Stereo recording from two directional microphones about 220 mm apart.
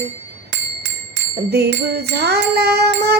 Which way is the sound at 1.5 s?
45° right (ahead or behind).